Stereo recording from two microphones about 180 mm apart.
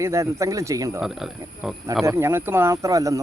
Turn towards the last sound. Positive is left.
turn(degrees=-20)  # may be behind; listen again after turning